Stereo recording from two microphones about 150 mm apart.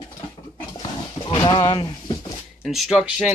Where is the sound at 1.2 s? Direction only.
30° left (ahead or behind).